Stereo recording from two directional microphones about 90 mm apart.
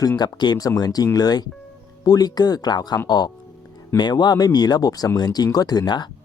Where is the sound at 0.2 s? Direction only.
50° left (ahead or behind).